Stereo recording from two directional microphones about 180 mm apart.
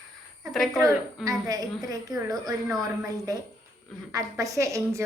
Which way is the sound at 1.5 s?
20° right (ahead or behind).